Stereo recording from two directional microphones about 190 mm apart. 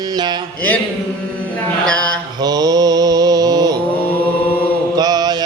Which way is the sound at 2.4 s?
20° right (ahead or behind).